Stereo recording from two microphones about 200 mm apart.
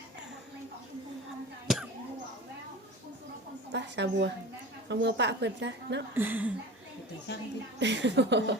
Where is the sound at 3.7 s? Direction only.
60° right (ahead or behind).